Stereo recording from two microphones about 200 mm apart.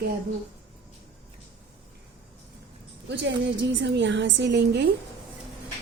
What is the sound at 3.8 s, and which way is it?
A woman's voice, 60° right (ahead or behind).